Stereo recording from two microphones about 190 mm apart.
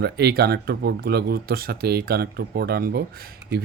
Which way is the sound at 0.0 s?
55° right (ahead or behind).